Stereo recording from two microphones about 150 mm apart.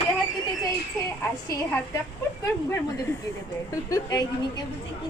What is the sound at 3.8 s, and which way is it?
Speech, 20° left (ahead or behind).